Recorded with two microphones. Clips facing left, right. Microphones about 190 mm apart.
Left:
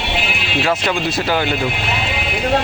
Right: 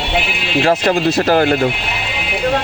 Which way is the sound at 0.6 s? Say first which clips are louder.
Right 5 dB; 40° right (ahead or behind).